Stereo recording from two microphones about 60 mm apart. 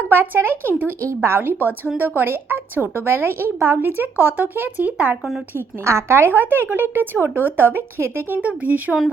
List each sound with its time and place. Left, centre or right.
0.1 s a woman's voice: right
5.5 s a woman's voice: right
8.4 s speech: right